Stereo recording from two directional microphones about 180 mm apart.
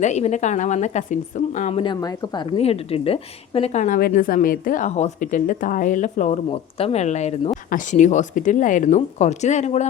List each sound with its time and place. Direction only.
0.0 s a woman's voice: 40° left (ahead or behind)
1.8 s a woman's voice: 25° left (ahead or behind); by 9.8 s 40° left (ahead or behind)